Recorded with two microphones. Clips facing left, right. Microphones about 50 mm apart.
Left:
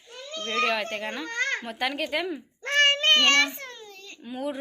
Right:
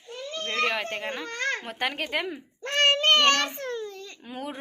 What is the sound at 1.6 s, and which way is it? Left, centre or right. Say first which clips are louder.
Speech: left 1 dB; right.